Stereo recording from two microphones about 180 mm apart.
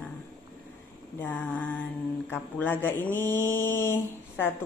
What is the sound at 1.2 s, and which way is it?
Speech, 10° left (ahead or behind).